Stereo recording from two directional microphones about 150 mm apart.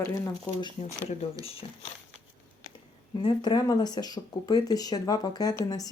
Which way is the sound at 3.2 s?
30° left (ahead or behind).